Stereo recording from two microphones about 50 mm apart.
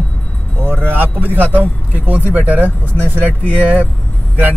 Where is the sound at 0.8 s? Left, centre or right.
Right.